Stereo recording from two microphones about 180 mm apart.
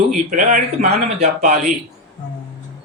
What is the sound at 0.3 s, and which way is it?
A man's voice, 45° right (ahead or behind).